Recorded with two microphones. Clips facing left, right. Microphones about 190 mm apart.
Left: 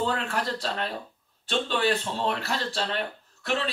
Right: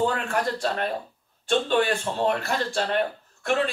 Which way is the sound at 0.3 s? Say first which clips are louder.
Right 4 dB; 50° right (ahead or behind).